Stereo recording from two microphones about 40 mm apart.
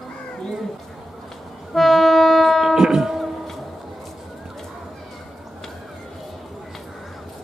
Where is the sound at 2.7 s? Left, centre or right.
Centre.